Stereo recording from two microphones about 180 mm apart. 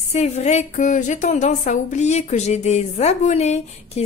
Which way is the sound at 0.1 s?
40° left (ahead or behind).